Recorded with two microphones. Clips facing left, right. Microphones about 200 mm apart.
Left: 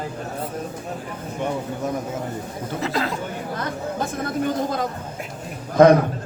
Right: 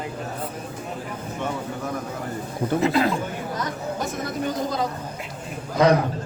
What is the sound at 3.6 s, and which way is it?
Speech, 55° left (ahead or behind).